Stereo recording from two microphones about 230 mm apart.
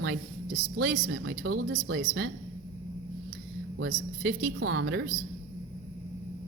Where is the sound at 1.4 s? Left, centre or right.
Right.